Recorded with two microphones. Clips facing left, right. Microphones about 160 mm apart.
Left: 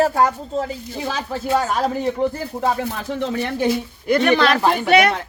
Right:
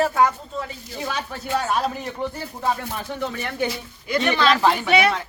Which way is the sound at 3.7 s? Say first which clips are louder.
Left 7 dB; 55° left (ahead or behind).